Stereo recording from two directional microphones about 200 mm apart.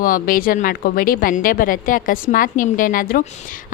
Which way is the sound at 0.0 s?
45° left (ahead or behind).